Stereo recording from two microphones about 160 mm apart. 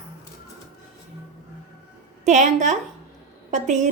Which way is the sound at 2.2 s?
45° right (ahead or behind).